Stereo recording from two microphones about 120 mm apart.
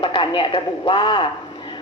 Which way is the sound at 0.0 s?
45° left (ahead or behind).